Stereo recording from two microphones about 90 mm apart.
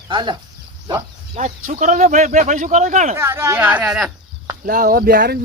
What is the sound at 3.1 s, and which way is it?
Speech, 30° right (ahead or behind).